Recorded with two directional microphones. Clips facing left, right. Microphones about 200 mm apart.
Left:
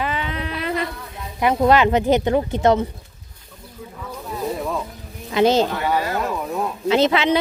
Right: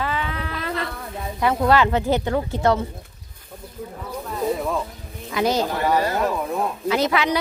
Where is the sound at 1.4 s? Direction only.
20° left (ahead or behind).